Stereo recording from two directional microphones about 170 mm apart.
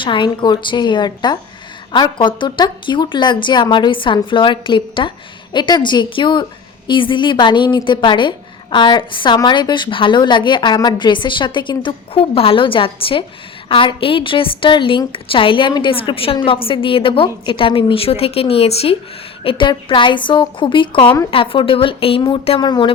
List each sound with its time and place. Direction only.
0.0 s a woman's voice: 30° left (ahead or behind)